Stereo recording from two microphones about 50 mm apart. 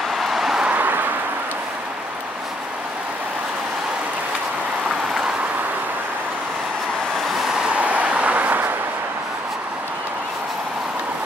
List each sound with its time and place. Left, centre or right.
0.2 s vehicle: centre
0.7 s vehicle: right
7.7 s vehicle: right